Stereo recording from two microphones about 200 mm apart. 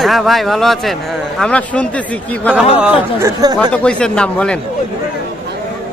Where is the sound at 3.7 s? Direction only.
5° left (ahead or behind).